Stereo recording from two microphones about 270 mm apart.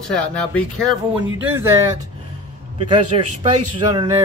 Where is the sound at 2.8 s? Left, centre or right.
Right.